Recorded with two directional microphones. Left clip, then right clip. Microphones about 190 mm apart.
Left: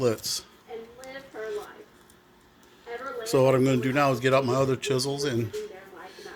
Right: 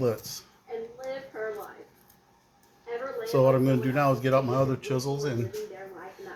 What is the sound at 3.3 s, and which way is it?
Speech, 70° left (ahead or behind).